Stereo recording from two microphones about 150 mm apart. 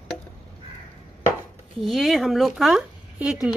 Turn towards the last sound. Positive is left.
turn(degrees=-5)  # may be behind; listen again after turning